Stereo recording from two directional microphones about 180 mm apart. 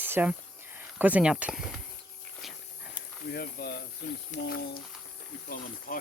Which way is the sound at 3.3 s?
60° left (ahead or behind).